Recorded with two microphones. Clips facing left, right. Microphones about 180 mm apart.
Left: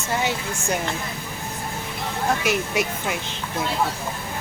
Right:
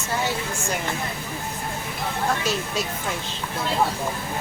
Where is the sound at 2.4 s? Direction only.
15° left (ahead or behind).